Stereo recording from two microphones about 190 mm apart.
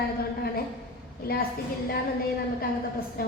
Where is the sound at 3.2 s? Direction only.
50° left (ahead or behind).